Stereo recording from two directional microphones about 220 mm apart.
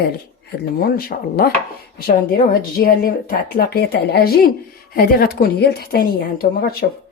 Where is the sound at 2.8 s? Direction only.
40° left (ahead or behind).